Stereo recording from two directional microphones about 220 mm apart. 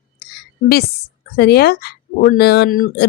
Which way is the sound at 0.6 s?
45° left (ahead or behind).